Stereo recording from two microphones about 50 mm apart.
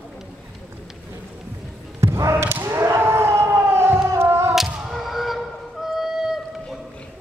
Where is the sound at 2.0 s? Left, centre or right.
Right.